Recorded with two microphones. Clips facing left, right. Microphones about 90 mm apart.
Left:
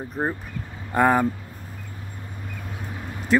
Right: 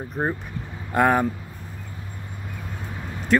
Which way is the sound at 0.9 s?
Centre (ahead or behind).